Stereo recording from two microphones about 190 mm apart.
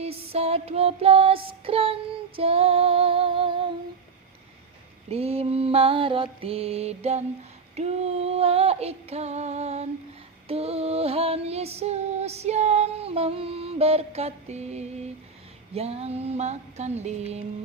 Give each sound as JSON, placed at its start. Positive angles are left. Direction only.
{"t": 0.0, "sound": "child singing", "side_deg": -30}
{"t": 5.0, "sound": "female singing", "side_deg": -30}